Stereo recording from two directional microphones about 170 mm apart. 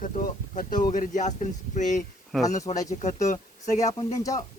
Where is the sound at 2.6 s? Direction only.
20° left (ahead or behind).